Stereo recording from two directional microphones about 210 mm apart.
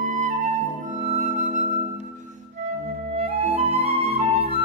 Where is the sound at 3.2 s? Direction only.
30° right (ahead or behind).